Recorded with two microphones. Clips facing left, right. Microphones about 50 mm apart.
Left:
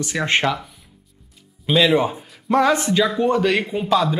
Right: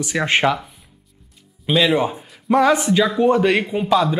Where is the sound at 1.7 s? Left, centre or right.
Centre.